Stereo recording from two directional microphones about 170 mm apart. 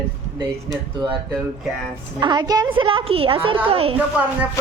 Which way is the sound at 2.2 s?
25° right (ahead or behind).